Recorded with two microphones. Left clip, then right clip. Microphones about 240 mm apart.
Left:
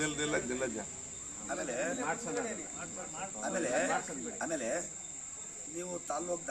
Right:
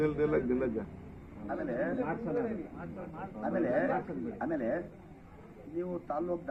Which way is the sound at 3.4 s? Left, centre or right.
Left.